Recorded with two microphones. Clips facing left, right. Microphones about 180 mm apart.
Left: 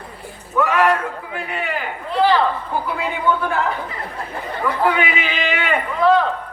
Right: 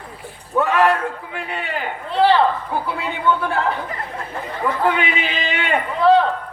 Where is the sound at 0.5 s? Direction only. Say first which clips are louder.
Even; 35° right (ahead or behind).